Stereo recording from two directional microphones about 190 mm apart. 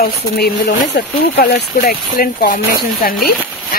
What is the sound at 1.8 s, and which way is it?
Speech, 50° left (ahead or behind).